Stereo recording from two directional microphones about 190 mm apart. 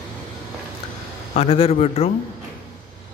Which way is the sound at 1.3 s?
30° left (ahead or behind).